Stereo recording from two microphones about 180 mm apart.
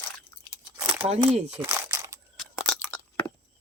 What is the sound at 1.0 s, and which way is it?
Speech, 35° right (ahead or behind).